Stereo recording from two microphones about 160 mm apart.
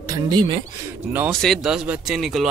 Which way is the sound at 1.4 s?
Centre (ahead or behind).